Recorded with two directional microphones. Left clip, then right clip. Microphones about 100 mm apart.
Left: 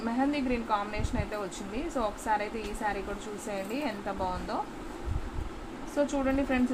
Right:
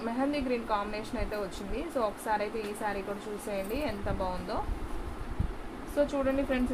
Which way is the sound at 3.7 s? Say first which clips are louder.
Even; 35° left (ahead or behind).